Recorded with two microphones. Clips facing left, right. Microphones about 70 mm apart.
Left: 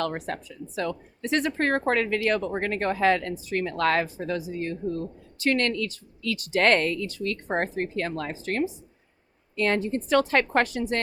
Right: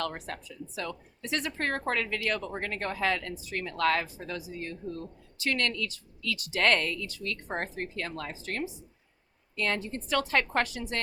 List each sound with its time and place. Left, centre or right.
0.0 s speech: left